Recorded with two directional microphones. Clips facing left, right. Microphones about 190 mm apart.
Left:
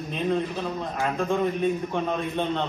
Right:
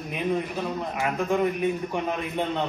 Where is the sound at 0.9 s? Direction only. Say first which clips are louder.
Even; 15° right (ahead or behind).